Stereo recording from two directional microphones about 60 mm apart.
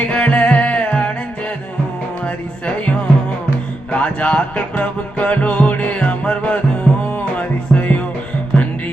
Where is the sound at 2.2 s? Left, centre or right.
Left.